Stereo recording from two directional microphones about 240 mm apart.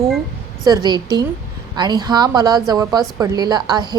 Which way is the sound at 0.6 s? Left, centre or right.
Centre.